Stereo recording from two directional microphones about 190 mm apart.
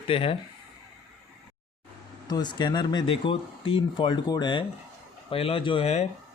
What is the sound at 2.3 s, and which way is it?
Speech, 20° left (ahead or behind).